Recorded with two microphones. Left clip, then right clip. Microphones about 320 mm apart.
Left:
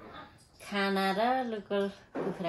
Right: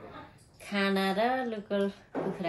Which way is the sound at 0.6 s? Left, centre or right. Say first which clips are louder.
Right 1 dB; centre.